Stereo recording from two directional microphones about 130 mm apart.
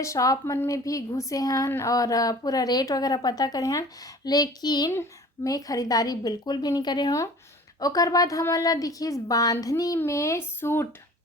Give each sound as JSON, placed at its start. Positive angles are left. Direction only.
{"t": 0.0, "sound": "a woman's voice", "side_deg": 25}